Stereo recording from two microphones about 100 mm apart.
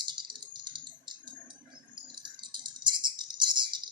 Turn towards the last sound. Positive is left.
turn(degrees=-50)  # may be behind; listen again after turning